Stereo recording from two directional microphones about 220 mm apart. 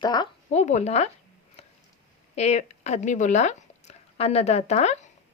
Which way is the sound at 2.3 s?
30° left (ahead or behind).